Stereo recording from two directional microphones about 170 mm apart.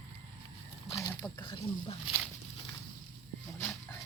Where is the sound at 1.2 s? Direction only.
25° left (ahead or behind).